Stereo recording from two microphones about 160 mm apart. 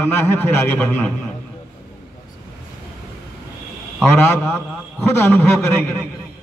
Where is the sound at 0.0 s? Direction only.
15° left (ahead or behind).